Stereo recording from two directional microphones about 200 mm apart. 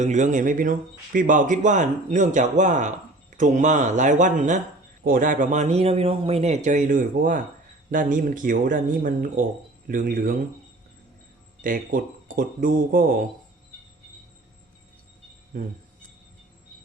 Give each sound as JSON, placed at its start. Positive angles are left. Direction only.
{"t": 0.0, "sound": "speech", "side_deg": -35}
{"t": 11.6, "sound": "speech", "side_deg": -45}
{"t": 15.5, "sound": "speech", "side_deg": -45}